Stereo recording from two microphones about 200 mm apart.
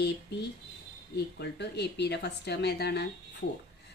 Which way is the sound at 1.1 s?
55° left (ahead or behind).